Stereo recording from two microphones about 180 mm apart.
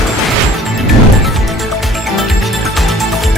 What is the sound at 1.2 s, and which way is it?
Music, centre (ahead or behind).